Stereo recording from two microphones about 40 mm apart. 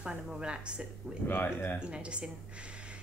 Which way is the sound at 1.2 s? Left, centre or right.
Left.